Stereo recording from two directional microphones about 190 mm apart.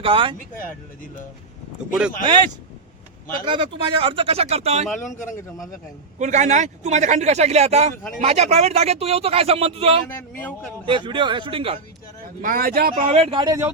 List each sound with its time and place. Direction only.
0.0 s speech: 30° right (ahead or behind)
3.4 s speech: 25° right (ahead or behind)
5.0 s a man's voice: 40° left (ahead or behind)
6.1 s a man's voice: 40° right (ahead or behind)
10.1 s speech: 10° left (ahead or behind)
10.8 s speech: 25° right (ahead or behind)
12.4 s speech: 50° right (ahead or behind)
12.9 s a man's voice: 35° right (ahead or behind); by 13.7 s 20° right (ahead or behind)